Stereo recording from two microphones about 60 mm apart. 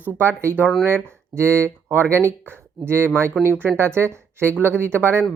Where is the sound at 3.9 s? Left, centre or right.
Right.